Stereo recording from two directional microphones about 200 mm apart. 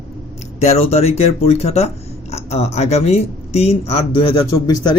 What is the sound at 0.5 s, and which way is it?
A man's voice, 35° left (ahead or behind).